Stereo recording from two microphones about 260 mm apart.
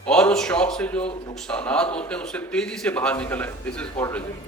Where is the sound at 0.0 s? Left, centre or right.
Centre.